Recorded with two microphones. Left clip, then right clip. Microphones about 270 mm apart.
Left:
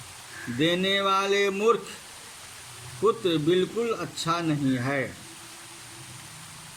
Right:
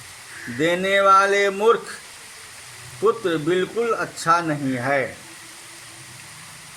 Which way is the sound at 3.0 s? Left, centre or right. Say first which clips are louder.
Right 4 dB; right.